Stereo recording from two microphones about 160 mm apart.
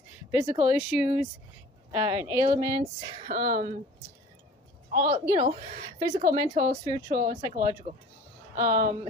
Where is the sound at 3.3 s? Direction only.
70° right (ahead or behind).